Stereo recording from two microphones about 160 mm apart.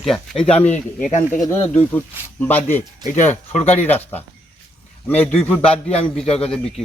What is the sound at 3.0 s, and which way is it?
Speech, 50° left (ahead or behind).